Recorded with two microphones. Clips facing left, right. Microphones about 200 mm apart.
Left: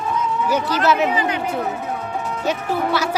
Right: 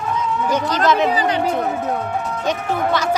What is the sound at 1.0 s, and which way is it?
Speech, 35° right (ahead or behind).